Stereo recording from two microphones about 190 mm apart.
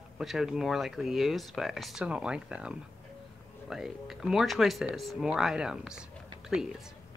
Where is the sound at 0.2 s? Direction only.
Centre (ahead or behind).